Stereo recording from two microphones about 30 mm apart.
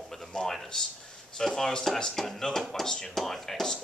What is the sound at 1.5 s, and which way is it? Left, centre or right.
A man's voice, centre.